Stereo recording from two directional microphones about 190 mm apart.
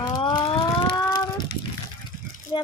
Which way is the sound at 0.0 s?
20° left (ahead or behind).